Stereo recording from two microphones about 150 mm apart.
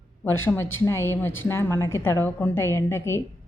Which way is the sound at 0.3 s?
15° left (ahead or behind).